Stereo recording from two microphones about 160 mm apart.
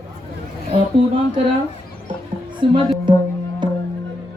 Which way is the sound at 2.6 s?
35° right (ahead or behind).